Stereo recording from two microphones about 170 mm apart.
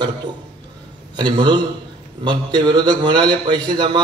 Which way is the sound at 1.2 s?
25° right (ahead or behind).